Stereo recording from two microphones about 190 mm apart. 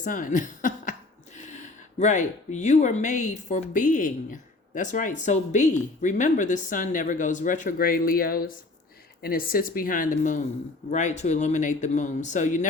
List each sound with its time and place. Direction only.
0.0 s speech: 45° left (ahead or behind)
2.0 s speech: 40° left (ahead or behind)